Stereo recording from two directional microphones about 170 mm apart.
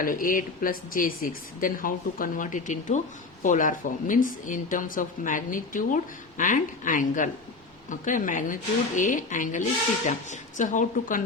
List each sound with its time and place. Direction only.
0.0 s speech: 55° left (ahead or behind)